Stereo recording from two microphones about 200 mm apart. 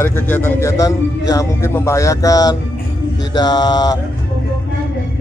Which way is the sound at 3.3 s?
20° left (ahead or behind).